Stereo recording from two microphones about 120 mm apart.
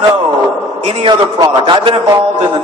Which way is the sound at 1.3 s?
40° right (ahead or behind).